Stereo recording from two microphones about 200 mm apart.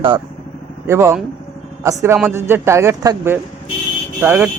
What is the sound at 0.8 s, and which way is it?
A man's voice, 15° right (ahead or behind).